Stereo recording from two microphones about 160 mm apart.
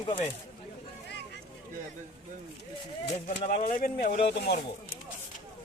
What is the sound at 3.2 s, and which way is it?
Speech, 55° left (ahead or behind).